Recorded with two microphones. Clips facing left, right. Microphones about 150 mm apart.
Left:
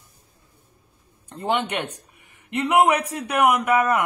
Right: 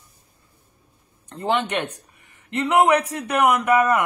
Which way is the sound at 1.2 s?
5° left (ahead or behind).